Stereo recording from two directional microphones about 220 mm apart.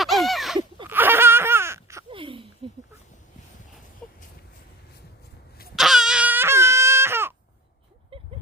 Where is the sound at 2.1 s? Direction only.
25° right (ahead or behind).